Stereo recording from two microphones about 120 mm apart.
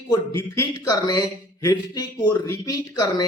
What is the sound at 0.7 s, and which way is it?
Speech, 35° left (ahead or behind).